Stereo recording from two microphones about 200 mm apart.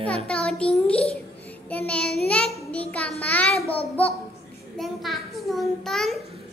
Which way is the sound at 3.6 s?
30° left (ahead or behind).